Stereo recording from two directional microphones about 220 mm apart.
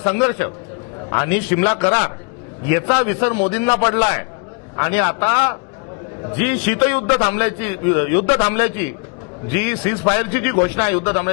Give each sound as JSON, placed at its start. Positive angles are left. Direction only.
{"t": 0.0, "sound": "a man's voice", "side_deg": 15}